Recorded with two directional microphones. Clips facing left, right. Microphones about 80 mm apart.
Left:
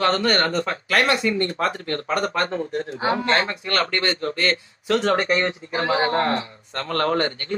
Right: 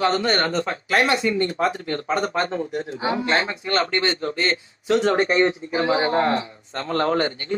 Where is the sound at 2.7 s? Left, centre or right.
Left.